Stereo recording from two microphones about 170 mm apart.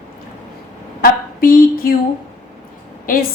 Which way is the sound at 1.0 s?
60° left (ahead or behind).